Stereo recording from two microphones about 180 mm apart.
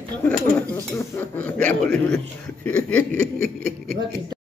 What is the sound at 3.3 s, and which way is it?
Speech, 50° right (ahead or behind).